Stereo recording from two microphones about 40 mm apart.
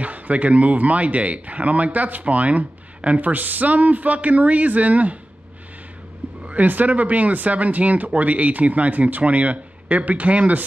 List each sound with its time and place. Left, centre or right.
0.0 s speech: right
6.4 s speech: right